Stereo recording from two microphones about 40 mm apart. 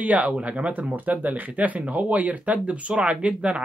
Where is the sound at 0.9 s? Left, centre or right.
Right.